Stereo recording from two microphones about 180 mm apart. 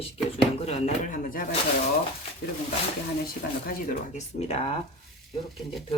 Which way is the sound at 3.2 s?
50° left (ahead or behind).